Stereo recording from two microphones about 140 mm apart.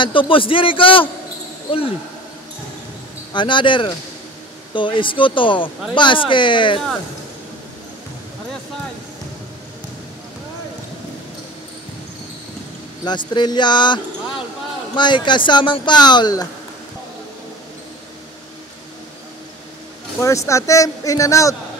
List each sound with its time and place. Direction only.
0.0 s speech: 35° left (ahead or behind)
3.3 s speech: 35° left (ahead or behind)
13.0 s speech: 30° left (ahead or behind)
20.2 s speech: 20° left (ahead or behind)